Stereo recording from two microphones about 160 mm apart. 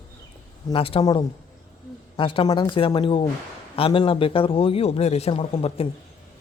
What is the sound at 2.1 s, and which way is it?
Speech, 30° left (ahead or behind).